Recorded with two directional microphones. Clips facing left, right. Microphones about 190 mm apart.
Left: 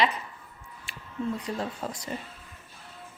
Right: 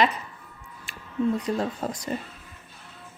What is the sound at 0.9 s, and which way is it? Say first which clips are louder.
Music: right 2 dB; 45° right (ahead or behind).